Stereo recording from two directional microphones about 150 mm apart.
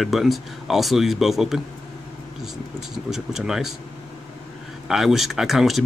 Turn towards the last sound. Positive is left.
turn(degrees=0)  # may be behind; listen again after turning